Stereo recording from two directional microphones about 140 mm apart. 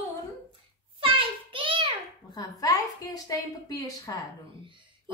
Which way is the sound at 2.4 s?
25° left (ahead or behind).